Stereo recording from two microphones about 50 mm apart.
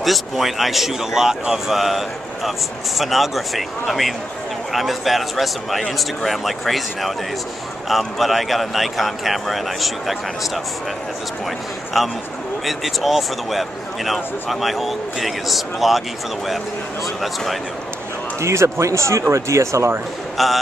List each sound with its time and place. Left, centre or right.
0.0 s a man's voice: centre
4.7 s a man's voice: centre
12.6 s a man's voice: centre
17.0 s a man's voice: centre
18.4 s speech: right
20.4 s a man's voice: centre